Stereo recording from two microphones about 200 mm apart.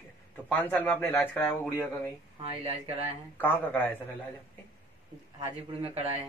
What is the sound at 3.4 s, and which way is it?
Speech, 10° left (ahead or behind).